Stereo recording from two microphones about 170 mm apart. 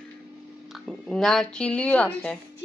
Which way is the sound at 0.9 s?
Centre (ahead or behind).